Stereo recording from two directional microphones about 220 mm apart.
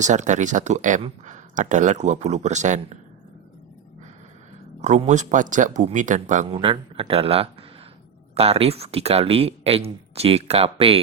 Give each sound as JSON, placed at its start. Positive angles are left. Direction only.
{"t": 0.0, "sound": "speech", "side_deg": -35}
{"t": 4.8, "sound": "speech", "side_deg": -30}